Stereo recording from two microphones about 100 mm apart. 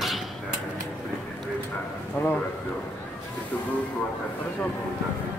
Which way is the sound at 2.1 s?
15° left (ahead or behind).